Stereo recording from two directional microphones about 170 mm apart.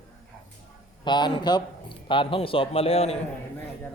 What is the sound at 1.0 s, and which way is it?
Speech, 25° left (ahead or behind).